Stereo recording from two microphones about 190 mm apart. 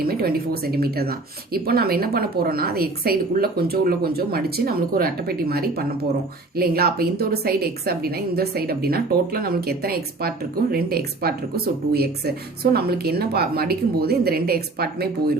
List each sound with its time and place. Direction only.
0.0 s a woman's voice: 55° right (ahead or behind)